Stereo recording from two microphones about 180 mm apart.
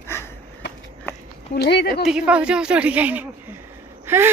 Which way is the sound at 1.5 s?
65° left (ahead or behind).